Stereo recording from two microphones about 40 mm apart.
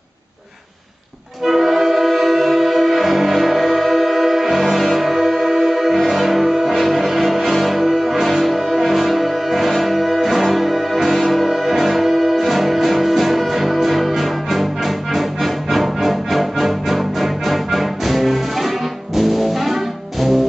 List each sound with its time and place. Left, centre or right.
1.4 s music: centre